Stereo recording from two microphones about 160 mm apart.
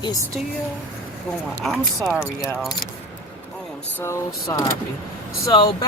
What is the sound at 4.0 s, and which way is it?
Speech, 20° left (ahead or behind).